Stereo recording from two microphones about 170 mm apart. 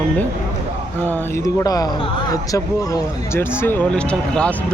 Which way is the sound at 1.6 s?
20° left (ahead or behind).